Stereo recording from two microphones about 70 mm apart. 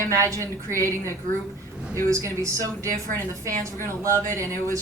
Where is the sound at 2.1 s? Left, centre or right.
Right.